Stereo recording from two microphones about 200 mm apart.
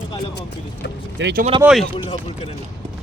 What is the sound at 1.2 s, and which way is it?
Speech, 60° right (ahead or behind).